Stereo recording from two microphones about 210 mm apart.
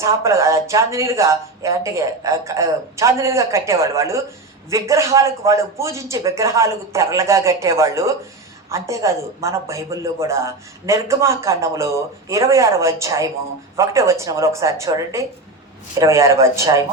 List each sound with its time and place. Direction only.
0.0 s speech: 15° right (ahead or behind)